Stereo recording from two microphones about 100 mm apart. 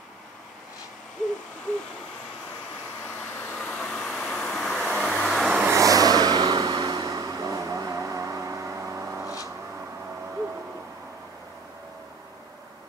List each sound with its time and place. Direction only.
3.2 s vehicle: 20° left (ahead or behind)
5.3 s vehicle: centre (ahead or behind)
5.6 s vehicle: 30° right (ahead or behind)